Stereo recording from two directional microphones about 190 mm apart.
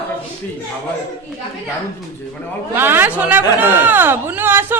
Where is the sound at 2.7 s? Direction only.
10° right (ahead or behind).